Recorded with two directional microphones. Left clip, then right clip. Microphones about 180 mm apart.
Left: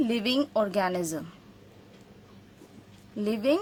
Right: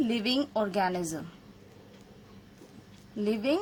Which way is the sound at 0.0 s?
30° left (ahead or behind).